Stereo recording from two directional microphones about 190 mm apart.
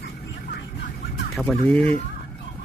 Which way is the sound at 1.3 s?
Centre (ahead or behind).